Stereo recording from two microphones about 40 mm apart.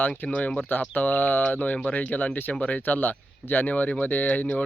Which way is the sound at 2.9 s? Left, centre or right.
Left.